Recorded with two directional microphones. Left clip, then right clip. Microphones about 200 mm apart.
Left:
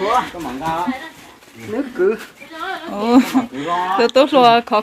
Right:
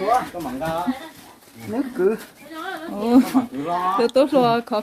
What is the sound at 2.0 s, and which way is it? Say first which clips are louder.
Speech: left 3 dB; 45° right (ahead or behind).